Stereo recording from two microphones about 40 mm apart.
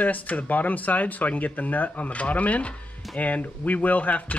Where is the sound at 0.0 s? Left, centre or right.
Left.